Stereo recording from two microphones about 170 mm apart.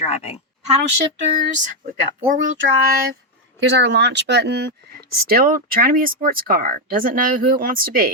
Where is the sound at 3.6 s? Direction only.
90° right.